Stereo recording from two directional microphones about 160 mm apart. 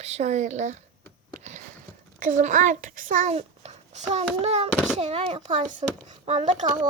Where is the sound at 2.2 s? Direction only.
50° right (ahead or behind).